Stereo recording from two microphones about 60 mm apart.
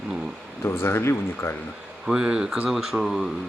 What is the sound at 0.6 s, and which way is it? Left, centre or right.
Speech, left.